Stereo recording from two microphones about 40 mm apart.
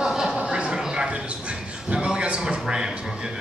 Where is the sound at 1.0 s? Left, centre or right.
Right.